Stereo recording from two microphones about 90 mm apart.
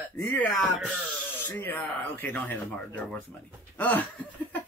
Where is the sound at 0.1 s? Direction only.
20° left (ahead or behind).